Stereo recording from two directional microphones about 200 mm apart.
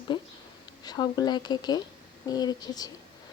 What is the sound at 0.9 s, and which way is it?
Speech, 20° left (ahead or behind).